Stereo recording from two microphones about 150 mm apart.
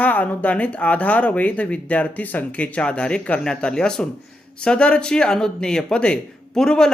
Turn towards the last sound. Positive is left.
turn(degrees=5)  # may be behind; listen again after turning